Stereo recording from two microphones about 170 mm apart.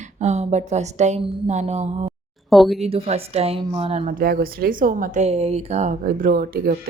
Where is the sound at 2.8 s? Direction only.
35° right (ahead or behind).